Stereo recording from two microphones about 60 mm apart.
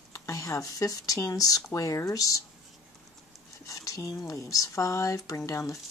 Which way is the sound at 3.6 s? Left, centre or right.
Left.